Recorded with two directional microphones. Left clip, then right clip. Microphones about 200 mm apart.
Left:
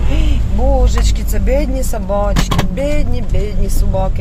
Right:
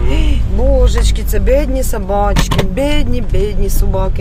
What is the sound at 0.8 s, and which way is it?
Speech, 10° right (ahead or behind).